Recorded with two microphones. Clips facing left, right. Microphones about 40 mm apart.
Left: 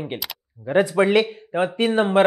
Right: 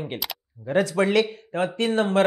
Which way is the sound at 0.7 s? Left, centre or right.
Centre.